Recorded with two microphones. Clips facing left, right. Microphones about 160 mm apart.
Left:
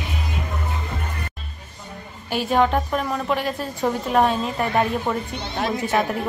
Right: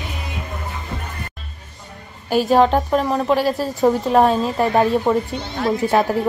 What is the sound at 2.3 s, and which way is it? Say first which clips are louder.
A woman's voice: right 5 dB; 40° right (ahead or behind).